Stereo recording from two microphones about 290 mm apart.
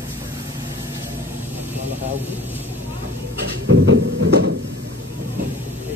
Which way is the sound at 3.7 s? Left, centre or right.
Right.